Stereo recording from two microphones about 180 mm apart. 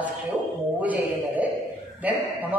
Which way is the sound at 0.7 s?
10° right (ahead or behind).